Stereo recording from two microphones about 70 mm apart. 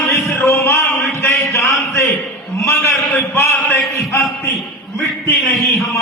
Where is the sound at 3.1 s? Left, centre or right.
Left.